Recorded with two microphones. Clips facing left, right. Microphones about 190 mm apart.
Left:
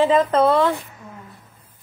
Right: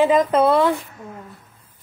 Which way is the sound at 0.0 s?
10° right (ahead or behind).